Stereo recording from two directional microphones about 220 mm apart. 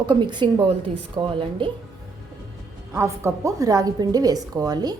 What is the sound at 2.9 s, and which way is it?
A woman's voice, 15° right (ahead or behind).